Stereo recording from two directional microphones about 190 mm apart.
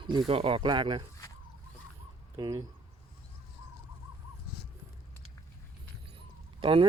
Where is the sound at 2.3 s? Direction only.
20° right (ahead or behind).